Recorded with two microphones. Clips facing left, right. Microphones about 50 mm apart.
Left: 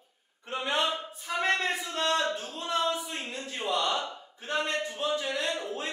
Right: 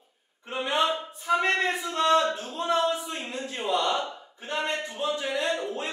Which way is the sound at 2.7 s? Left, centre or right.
Centre.